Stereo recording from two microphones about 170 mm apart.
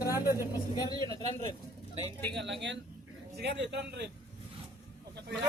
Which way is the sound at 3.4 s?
90° right.